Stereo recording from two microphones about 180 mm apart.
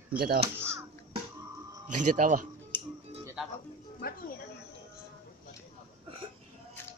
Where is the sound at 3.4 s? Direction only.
5° right (ahead or behind).